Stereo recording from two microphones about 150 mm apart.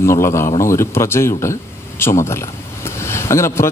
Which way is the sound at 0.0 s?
20° left (ahead or behind).